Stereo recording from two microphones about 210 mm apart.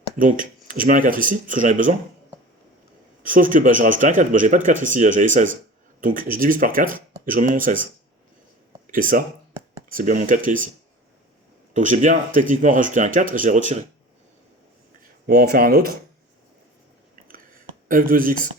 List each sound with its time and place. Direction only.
0.2 s speech: 40° right (ahead or behind)
3.2 s speech: 40° right (ahead or behind)
8.9 s speech: 40° right (ahead or behind)
11.7 s speech: 35° right (ahead or behind)
15.3 s speech: 45° right (ahead or behind)
17.8 s speech: 40° right (ahead or behind)